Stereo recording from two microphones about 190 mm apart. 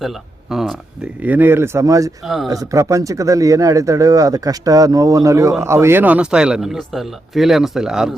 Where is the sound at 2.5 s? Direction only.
15° right (ahead or behind).